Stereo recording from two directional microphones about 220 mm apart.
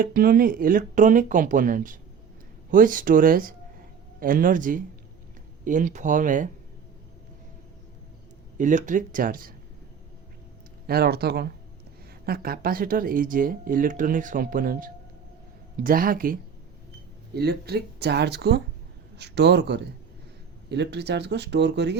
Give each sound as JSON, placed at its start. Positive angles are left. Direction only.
{"t": 0.0, "sound": "speech", "side_deg": -40}
{"t": 8.5, "sound": "speech", "side_deg": -35}
{"t": 10.8, "sound": "speech", "side_deg": -45}